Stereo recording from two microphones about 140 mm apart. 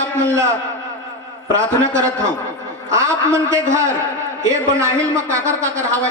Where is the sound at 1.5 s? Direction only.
20° right (ahead or behind).